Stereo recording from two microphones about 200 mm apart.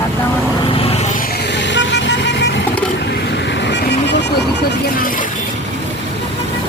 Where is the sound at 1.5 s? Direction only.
65° left (ahead or behind).